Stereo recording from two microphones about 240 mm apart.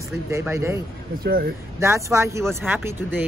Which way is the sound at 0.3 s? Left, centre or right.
Centre.